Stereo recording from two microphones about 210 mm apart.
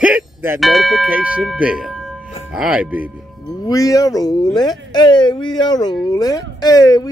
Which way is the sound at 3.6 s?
15° left (ahead or behind).